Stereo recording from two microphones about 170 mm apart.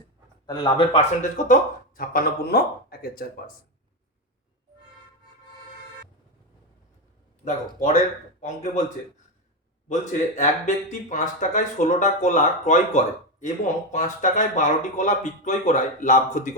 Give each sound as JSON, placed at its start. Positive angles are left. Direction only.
{"t": 0.4, "sound": "a man's voice", "side_deg": 30}
{"t": 1.2, "sound": "speech", "side_deg": 50}
{"t": 2.0, "sound": "speech", "side_deg": 60}
{"t": 7.4, "sound": "speech", "side_deg": 40}
{"t": 9.9, "sound": "speech", "side_deg": 45}